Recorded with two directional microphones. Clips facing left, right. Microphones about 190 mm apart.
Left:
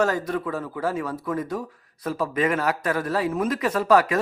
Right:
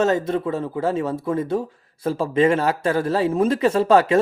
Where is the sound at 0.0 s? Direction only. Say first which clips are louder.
Right 4 dB; 25° right (ahead or behind).